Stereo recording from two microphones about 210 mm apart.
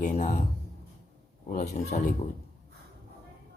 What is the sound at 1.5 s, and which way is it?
Speech, 35° left (ahead or behind).